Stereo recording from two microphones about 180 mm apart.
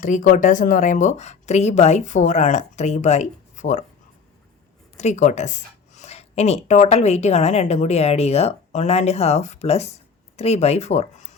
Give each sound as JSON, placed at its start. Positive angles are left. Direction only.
{"t": 0.0, "sound": "speech", "side_deg": 45}
{"t": 4.9, "sound": "speech", "side_deg": 40}